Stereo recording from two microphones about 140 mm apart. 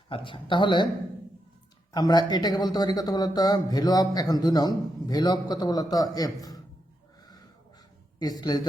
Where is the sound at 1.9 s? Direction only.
30° left (ahead or behind).